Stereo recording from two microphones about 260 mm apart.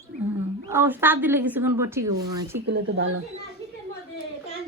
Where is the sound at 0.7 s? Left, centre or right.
Centre.